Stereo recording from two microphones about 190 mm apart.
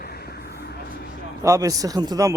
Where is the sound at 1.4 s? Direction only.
15° right (ahead or behind).